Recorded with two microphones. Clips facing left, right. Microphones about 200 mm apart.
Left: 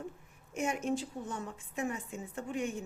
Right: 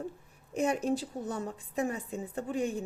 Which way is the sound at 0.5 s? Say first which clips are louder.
Right 4 dB; 35° right (ahead or behind).